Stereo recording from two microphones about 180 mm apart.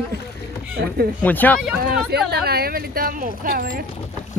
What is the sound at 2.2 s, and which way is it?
Speech, 60° right (ahead or behind).